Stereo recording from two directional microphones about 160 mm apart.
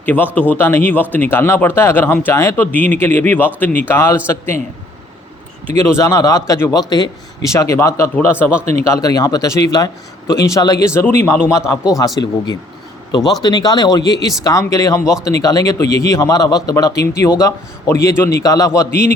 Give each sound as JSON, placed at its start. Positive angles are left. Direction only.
{"t": 0.0, "sound": "speech", "side_deg": 10}
{"t": 5.9, "sound": "a man's voice", "side_deg": 20}
{"t": 18.9, "sound": "a man's voice", "side_deg": 90}